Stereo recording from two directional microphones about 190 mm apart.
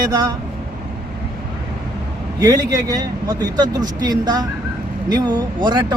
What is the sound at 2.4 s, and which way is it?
Speech, 20° right (ahead or behind).